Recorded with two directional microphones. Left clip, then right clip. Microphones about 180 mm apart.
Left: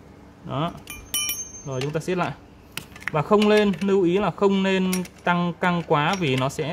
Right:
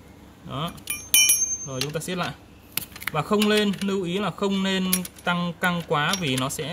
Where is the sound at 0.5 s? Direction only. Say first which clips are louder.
Left 3 dB; 50° left (ahead or behind).